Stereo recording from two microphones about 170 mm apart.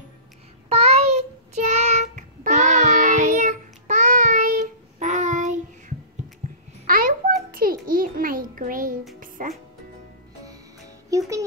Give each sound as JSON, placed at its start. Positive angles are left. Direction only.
{"t": 0.7, "sound": "child singing", "side_deg": -40}
{"t": 6.4, "sound": "babbling", "side_deg": -50}
{"t": 6.9, "sound": "a sound", "side_deg": -55}
{"t": 9.4, "sound": "music", "side_deg": -55}
{"t": 11.1, "sound": "music", "side_deg": -20}